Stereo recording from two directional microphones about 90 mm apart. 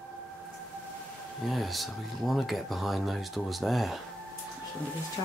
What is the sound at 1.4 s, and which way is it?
Speech, centre (ahead or behind).